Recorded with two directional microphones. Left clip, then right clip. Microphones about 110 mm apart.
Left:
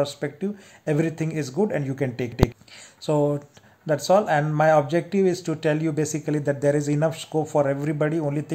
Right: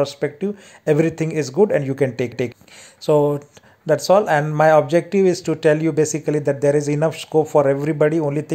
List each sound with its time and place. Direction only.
0.0 s speech: 30° right (ahead or behind)